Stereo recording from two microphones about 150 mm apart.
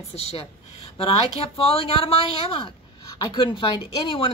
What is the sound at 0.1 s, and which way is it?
Speech, 40° left (ahead or behind).